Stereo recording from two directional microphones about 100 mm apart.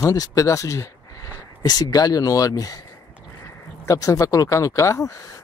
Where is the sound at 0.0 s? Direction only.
35° left (ahead or behind).